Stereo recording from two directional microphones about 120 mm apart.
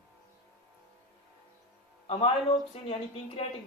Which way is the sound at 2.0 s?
45° left (ahead or behind).